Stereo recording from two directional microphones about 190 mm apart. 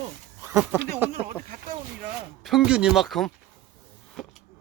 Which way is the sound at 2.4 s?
5° right (ahead or behind).